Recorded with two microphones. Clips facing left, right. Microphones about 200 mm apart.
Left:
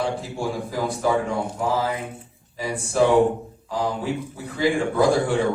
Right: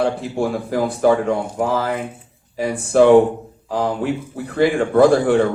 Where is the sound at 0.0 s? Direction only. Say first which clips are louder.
Right 6 dB; 60° right (ahead or behind).